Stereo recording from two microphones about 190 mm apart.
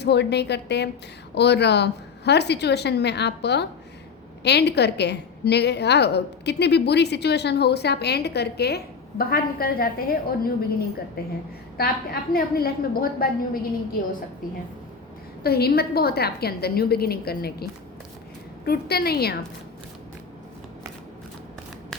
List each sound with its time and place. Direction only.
0.0 s a woman's voice: 60° left (ahead or behind)
12.3 s a woman's voice: 50° left (ahead or behind)
15.4 s a woman's voice: 55° left (ahead or behind)